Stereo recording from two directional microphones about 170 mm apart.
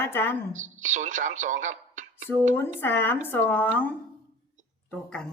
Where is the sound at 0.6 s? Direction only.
45° right (ahead or behind).